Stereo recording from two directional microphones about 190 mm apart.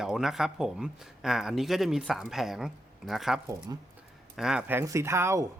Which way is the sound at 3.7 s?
20° right (ahead or behind).